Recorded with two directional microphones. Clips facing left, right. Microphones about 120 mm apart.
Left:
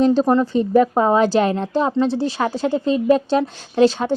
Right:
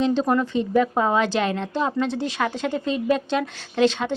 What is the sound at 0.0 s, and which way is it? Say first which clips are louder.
A woman's voice: left 5 dB; 40° left (ahead or behind).